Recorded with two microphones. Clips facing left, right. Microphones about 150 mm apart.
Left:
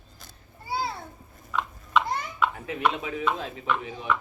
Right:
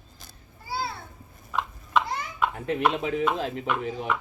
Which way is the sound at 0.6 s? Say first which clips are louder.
Left 2 dB; 20° left (ahead or behind).